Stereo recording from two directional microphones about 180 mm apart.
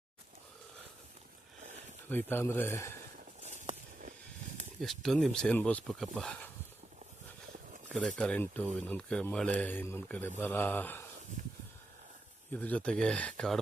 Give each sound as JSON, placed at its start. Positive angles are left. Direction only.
{"t": 2.0, "sound": "speech", "side_deg": 10}
{"t": 3.4, "sound": "a sound", "side_deg": -40}
{"t": 4.8, "sound": "speech", "side_deg": 0}
{"t": 7.9, "sound": "speech", "side_deg": 0}
{"t": 11.4, "sound": "a sound", "side_deg": -45}
{"t": 12.5, "sound": "speech", "side_deg": 10}